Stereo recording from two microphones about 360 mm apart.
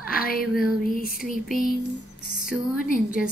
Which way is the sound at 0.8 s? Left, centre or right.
Left.